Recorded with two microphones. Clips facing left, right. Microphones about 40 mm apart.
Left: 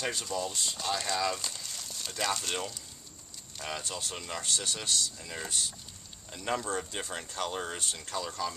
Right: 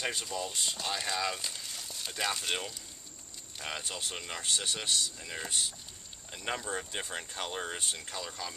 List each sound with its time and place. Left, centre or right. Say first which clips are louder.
0.0 s speech: left 2 dB; centre